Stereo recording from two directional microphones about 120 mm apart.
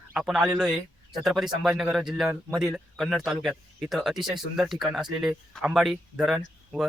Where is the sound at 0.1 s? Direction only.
Centre (ahead or behind).